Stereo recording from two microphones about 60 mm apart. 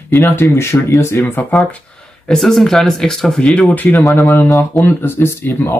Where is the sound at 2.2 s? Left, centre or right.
Centre.